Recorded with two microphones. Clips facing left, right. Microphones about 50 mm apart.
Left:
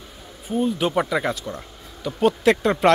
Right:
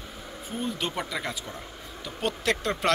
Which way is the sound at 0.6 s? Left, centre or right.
Centre.